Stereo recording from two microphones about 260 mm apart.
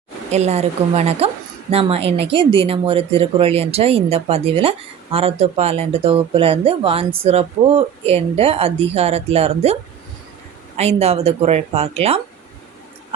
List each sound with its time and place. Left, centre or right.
0.3 s speech: right
10.8 s speech: right